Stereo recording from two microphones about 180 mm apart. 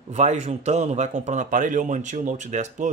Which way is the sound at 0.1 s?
40° right (ahead or behind).